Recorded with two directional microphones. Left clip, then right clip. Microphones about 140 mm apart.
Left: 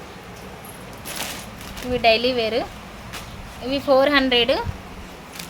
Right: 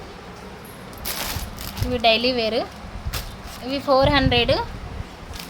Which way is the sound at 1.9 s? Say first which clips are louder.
Left 1 dB; 5° left (ahead or behind).